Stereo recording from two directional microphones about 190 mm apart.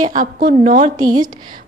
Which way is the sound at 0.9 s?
20° right (ahead or behind).